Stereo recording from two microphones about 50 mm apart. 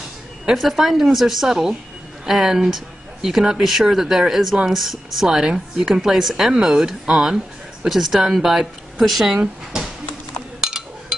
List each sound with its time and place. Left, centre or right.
0.6 s a woman's voice: centre